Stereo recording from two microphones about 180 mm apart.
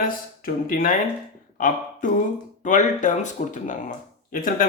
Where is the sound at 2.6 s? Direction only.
45° left (ahead or behind).